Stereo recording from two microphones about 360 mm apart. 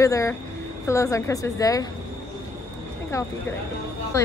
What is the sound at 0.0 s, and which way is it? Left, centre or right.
A woman's voice, centre.